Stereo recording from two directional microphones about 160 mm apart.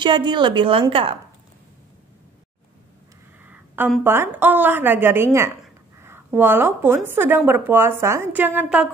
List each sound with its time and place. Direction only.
0.0 s a woman's voice: 30° right (ahead or behind)
3.4 s a sound: 10° right (ahead or behind)
4.0 s a woman's voice: 15° right (ahead or behind)